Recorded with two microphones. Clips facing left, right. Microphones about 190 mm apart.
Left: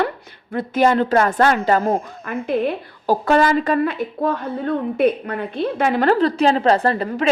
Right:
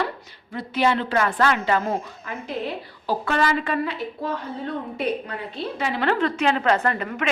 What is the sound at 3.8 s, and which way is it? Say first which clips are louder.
A woman's voice: left 7 dB; 55° left (ahead or behind).